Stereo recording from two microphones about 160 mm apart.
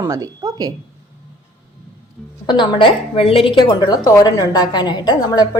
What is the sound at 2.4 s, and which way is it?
A woman's voice, 30° left (ahead or behind).